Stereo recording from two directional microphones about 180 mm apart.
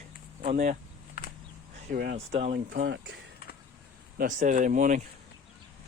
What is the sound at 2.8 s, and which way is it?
Speech, 75° right (ahead or behind).